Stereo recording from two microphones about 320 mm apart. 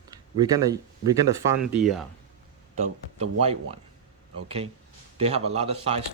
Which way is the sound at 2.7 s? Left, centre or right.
Centre.